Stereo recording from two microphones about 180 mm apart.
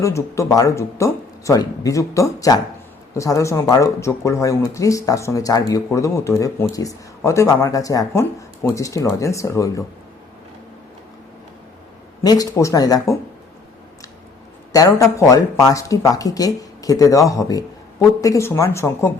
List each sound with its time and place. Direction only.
0.0 s speech: 15° left (ahead or behind)
12.2 s speech: 20° left (ahead or behind)
14.7 s speech: 20° left (ahead or behind)